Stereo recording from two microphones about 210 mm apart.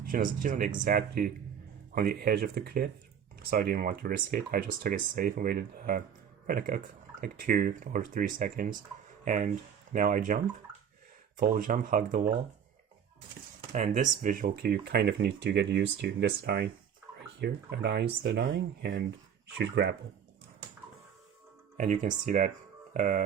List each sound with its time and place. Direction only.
0.0 s speech: 40° right (ahead or behind)
13.7 s speech: 35° right (ahead or behind)
21.8 s speech: 35° right (ahead or behind)